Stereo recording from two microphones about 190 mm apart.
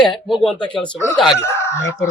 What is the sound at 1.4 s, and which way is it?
Speech, 15° left (ahead or behind).